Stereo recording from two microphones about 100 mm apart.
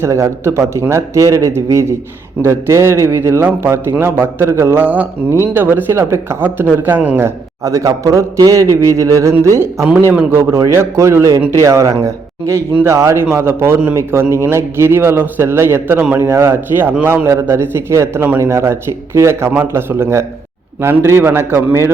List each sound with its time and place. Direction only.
0.0 s a man's voice: 30° right (ahead or behind)
7.6 s a man's voice: 35° right (ahead or behind)
16.0 s a man's voice: 15° right (ahead or behind)
16.2 s a man's voice: 30° right (ahead or behind)